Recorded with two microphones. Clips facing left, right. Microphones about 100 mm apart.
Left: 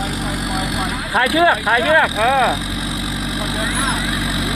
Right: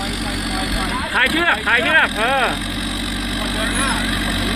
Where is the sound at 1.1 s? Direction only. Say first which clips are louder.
Left 5 dB; 20° left (ahead or behind).